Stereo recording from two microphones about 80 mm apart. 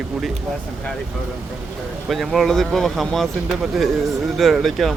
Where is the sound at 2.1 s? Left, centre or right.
Centre.